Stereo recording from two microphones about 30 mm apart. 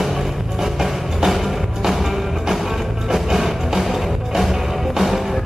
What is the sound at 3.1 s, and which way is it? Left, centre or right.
Music, centre.